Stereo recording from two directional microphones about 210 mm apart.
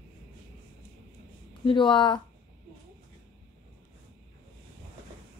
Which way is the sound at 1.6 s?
25° left (ahead or behind).